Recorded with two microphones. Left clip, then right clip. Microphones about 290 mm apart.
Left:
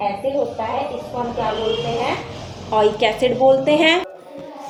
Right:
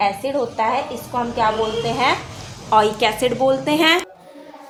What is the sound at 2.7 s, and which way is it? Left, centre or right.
A woman's voice, right.